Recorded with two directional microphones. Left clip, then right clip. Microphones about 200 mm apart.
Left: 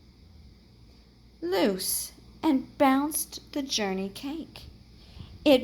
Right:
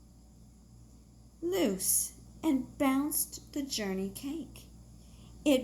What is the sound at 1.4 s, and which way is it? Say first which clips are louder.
A woman's voice: left 5 dB; 35° left (ahead or behind).